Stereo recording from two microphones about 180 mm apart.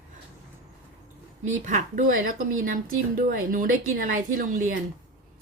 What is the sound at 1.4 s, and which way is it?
Dishes, 45° right (ahead or behind).